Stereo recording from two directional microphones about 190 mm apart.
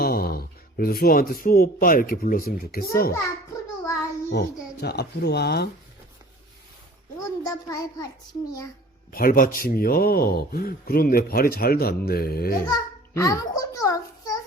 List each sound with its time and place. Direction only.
0.0 s speech: 50° left (ahead or behind)
4.3 s speech: 55° left (ahead or behind)
7.4 s a child's voice: 20° left (ahead or behind)
9.1 s a man's voice: 50° left (ahead or behind)
12.6 s a child's voice: 20° left (ahead or behind)